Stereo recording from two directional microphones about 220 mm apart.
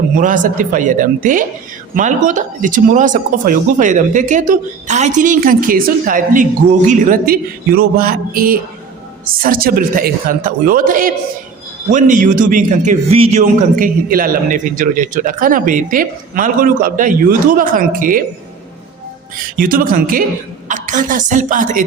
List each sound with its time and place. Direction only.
0.2 s speech: 35° right (ahead or behind)
19.5 s speech: 40° right (ahead or behind)